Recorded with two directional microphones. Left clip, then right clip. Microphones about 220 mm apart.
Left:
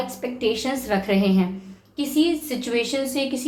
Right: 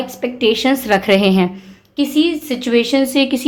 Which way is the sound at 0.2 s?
45° right (ahead or behind).